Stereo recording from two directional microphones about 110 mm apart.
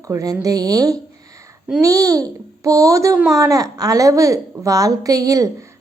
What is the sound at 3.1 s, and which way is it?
Speech, 5° right (ahead or behind).